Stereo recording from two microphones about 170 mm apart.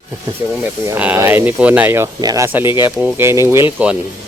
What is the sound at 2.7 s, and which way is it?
Speech, 25° left (ahead or behind).